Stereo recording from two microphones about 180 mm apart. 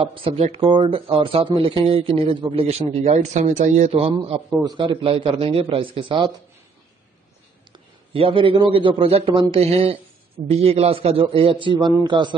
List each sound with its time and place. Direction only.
0.0 s a man's voice: 30° right (ahead or behind)
8.1 s a man's voice: 30° right (ahead or behind)